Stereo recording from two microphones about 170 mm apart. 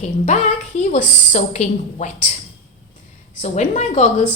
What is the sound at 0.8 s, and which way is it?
A woman's voice, 45° left (ahead or behind).